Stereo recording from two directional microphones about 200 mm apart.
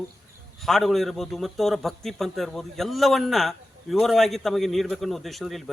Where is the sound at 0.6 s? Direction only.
Centre (ahead or behind).